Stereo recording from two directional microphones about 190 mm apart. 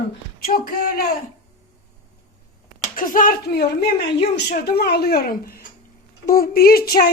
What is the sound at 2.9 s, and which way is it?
Speech, 45° left (ahead or behind).